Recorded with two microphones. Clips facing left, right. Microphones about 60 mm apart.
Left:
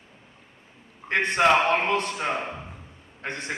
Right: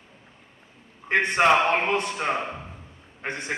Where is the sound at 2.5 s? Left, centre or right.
Centre.